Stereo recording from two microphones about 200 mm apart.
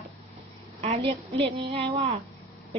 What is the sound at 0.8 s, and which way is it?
A woman's voice, 30° right (ahead or behind).